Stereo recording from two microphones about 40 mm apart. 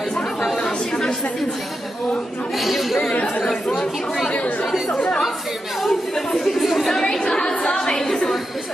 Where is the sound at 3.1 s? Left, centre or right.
Left.